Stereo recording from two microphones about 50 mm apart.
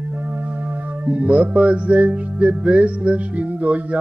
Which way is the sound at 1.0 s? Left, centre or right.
Right.